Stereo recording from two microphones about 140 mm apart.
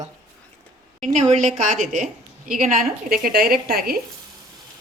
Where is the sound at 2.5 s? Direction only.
80° right.